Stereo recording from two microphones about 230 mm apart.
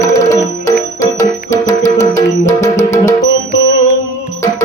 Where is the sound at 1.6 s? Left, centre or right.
Left.